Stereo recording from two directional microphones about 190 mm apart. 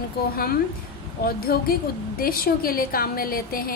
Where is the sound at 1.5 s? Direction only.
55° left (ahead or behind).